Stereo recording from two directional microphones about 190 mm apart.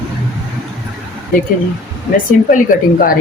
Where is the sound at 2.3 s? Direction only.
45° left (ahead or behind).